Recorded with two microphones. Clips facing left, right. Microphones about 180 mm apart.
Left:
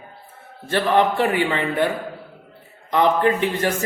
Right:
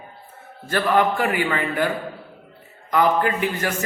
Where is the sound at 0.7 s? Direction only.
25° left (ahead or behind).